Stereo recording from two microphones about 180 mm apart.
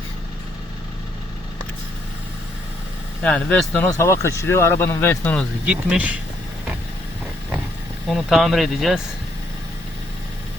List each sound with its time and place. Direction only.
3.2 s speech: 5° left (ahead or behind)
3.8 s speech: 15° left (ahead or behind)
5.6 s speech: 5° right (ahead or behind)
8.1 s speech: centre (ahead or behind)